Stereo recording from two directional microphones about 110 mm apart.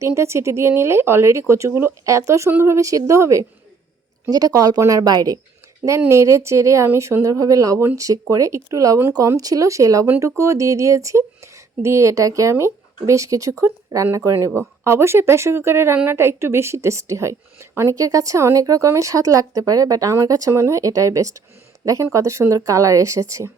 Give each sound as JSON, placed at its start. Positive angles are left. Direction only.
{"t": 0.0, "sound": "a woman's voice", "side_deg": -25}